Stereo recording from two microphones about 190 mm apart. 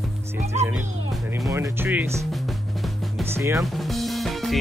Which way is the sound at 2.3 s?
Centre (ahead or behind).